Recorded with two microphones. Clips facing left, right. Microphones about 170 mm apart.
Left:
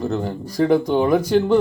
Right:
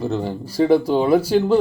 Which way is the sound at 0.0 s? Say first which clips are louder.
Even; 5° right (ahead or behind).